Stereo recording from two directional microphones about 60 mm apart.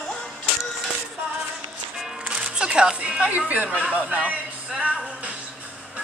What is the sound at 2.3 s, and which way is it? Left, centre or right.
Speech, centre.